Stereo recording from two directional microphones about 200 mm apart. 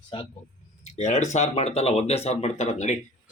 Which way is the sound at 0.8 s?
35° left (ahead or behind).